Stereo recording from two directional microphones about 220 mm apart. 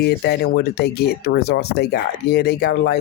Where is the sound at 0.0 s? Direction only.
50° left (ahead or behind).